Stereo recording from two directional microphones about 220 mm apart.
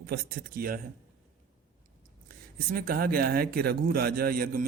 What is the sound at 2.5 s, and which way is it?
A man's voice, 40° right (ahead or behind).